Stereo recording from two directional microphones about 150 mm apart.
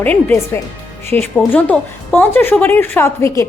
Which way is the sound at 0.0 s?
10° left (ahead or behind).